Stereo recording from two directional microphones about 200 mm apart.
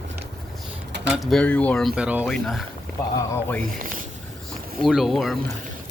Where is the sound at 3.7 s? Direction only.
40° right (ahead or behind).